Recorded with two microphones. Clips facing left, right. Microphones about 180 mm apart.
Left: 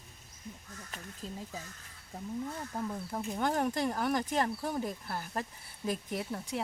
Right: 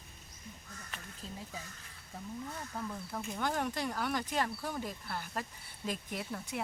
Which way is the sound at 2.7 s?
20° left (ahead or behind).